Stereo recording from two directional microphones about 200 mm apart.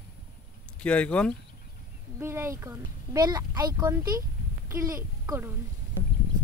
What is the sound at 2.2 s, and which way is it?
A woman's voice, 10° right (ahead or behind).